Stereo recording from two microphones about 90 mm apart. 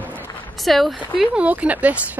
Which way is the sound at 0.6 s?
Centre (ahead or behind).